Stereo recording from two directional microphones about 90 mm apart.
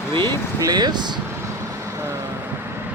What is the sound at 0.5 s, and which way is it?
Speech, 45° right (ahead or behind).